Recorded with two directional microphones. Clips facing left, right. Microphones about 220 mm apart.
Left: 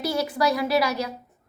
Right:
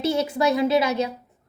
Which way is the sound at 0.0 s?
25° right (ahead or behind).